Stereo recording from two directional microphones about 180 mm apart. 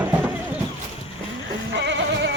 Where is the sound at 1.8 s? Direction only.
70° right (ahead or behind).